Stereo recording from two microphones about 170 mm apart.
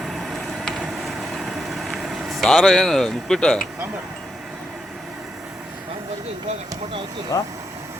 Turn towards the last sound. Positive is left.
turn(degrees=20)  # may be behind; listen again after turning